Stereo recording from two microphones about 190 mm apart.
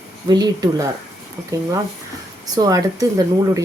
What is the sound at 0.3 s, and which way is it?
Speech, 20° right (ahead or behind).